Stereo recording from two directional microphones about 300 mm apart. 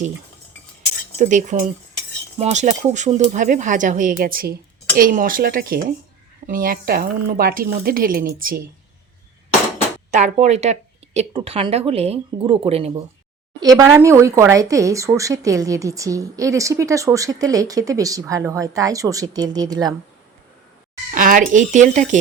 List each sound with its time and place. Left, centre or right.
1.2 s speech: right
10.1 s speech: right
21.1 s speech: right